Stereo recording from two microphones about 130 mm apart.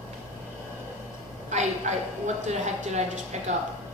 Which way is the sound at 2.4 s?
60° right (ahead or behind).